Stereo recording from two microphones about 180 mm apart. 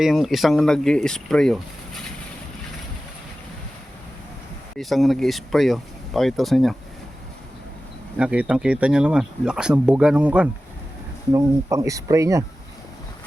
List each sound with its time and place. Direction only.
0.0 s speech: centre (ahead or behind)
4.8 s speech: centre (ahead or behind)
8.2 s speech: 5° right (ahead or behind)
11.3 s speech: 15° right (ahead or behind)